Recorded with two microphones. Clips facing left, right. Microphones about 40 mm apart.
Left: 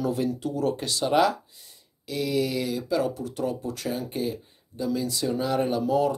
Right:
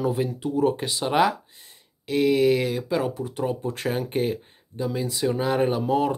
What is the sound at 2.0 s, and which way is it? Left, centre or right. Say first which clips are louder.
Speech: right 7 dB; right.